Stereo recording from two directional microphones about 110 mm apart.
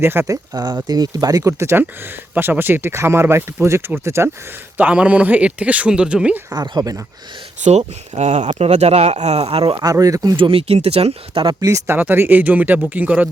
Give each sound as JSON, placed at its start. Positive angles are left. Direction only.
{"t": 0.0, "sound": "speech", "side_deg": -20}
{"t": 0.5, "sound": "speech", "side_deg": -40}
{"t": 4.8, "sound": "speech", "side_deg": -10}
{"t": 6.5, "sound": "speech", "side_deg": -35}
{"t": 7.6, "sound": "speech", "side_deg": -90}
{"t": 9.7, "sound": "speech", "side_deg": -35}
{"t": 10.3, "sound": "speech", "side_deg": -55}
{"t": 11.6, "sound": "speech", "side_deg": -25}